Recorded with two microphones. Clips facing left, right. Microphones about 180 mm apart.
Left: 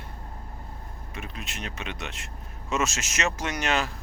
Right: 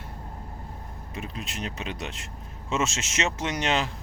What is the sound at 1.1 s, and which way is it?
Speech, 30° right (ahead or behind).